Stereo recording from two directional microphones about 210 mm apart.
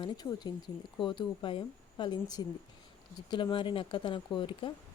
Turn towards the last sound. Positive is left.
turn(degrees=25)  # may be behind; listen again after turning